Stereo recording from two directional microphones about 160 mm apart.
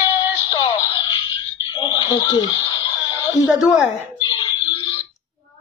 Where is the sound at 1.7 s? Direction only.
25° left (ahead or behind).